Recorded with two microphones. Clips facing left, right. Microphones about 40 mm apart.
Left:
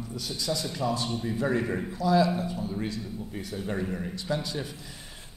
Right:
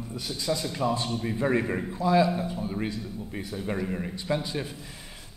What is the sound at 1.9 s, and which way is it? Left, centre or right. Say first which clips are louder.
A man's voice: right 1 dB; right.